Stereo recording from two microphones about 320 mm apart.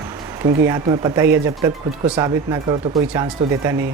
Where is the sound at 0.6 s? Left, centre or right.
Centre.